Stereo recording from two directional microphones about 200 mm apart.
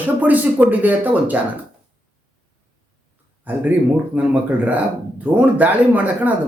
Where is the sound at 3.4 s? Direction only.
10° right (ahead or behind).